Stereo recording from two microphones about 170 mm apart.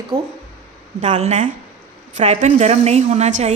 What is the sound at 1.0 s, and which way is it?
A woman's voice, 40° right (ahead or behind).